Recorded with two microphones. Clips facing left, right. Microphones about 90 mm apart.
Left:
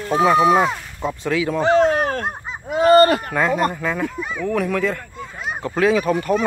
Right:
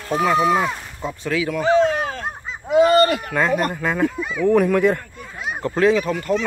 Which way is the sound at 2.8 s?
40° left (ahead or behind).